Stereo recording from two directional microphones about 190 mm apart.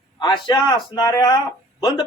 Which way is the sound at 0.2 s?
25° left (ahead or behind).